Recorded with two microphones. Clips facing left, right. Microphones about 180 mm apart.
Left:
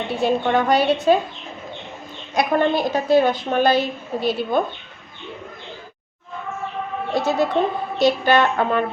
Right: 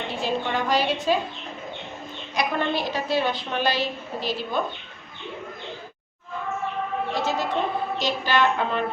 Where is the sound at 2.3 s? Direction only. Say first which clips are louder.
Left 7 dB; 50° left (ahead or behind).